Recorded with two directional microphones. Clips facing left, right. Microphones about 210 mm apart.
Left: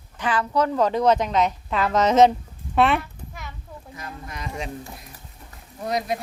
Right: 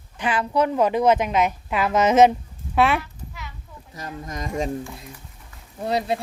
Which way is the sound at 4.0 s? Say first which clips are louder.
Right 5 dB; 40° right (ahead or behind).